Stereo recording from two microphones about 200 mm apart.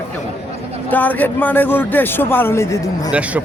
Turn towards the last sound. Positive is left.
turn(degrees=-5)  # may be behind; listen again after turning